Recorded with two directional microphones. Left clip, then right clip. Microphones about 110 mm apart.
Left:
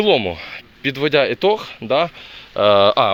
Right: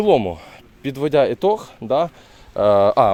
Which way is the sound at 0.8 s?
55° right (ahead or behind).